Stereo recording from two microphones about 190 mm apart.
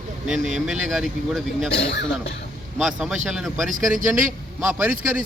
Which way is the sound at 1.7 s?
65° left (ahead or behind).